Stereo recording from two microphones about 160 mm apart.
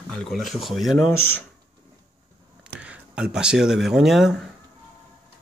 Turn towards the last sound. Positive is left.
turn(degrees=0)  # may be behind; listen again after turning